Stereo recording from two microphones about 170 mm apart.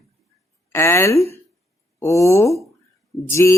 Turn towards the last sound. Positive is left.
turn(degrees=15)  # may be behind; listen again after turning